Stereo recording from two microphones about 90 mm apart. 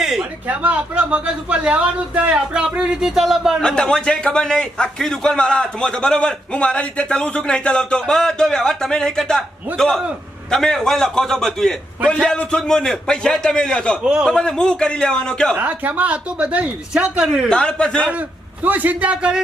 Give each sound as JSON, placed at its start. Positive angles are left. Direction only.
{"t": 0.0, "sound": "a sound", "side_deg": -5}
{"t": 0.4, "sound": "speech", "side_deg": -15}
{"t": 3.6, "sound": "a man's voice", "side_deg": 10}
{"t": 14.0, "sound": "speech", "side_deg": -10}
{"t": 14.3, "sound": "a man's voice", "side_deg": 10}
{"t": 15.5, "sound": "speech", "side_deg": -20}
{"t": 17.5, "sound": "a man's voice", "side_deg": 10}
{"t": 18.6, "sound": "speech", "side_deg": -20}